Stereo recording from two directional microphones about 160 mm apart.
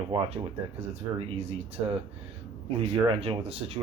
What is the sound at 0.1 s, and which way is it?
Speech, 35° right (ahead or behind).